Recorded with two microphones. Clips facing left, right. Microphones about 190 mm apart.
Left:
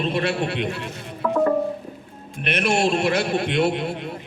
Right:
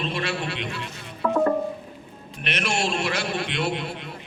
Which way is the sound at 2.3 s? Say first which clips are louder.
Left 6 dB; 55° left (ahead or behind).